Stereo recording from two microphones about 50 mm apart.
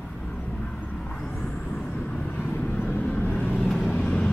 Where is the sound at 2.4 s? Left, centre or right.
Left.